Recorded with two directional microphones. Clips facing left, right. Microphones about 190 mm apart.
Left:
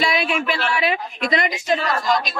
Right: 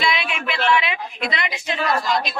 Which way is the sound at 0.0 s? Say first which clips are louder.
Left 3 dB; 40° left (ahead or behind).